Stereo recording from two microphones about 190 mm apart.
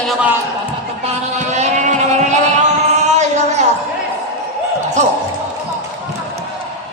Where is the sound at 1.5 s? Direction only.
35° right (ahead or behind).